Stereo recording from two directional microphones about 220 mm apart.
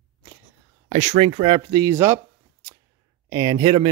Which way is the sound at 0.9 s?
30° right (ahead or behind).